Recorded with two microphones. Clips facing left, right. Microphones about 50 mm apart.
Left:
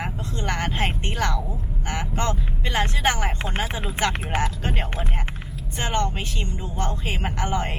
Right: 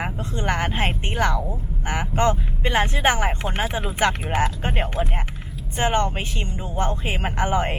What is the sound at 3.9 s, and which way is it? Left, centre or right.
Speech, right.